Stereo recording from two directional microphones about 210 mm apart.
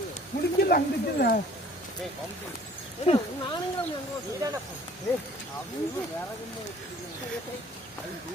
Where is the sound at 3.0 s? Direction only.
25° left (ahead or behind).